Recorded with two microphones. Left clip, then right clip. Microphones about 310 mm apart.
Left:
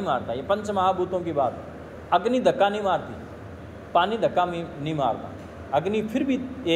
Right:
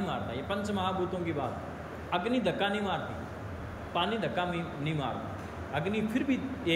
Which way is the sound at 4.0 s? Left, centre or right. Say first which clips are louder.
Left 7 dB; centre.